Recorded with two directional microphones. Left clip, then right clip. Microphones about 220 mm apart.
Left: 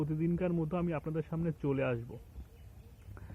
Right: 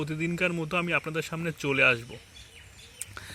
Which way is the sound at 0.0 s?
20° right (ahead or behind).